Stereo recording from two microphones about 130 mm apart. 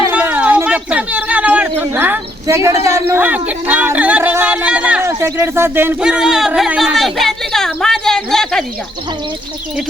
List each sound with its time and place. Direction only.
0.1 s a sound: 10° right (ahead or behind)
2.6 s a man's voice: 20° right (ahead or behind)
5.0 s speech: 20° right (ahead or behind)
6.0 s speech: 5° right (ahead or behind)